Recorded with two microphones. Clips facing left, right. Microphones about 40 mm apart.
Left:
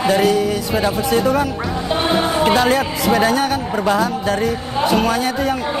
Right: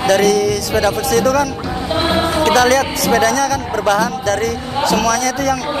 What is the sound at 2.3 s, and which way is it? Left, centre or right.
Speech, right.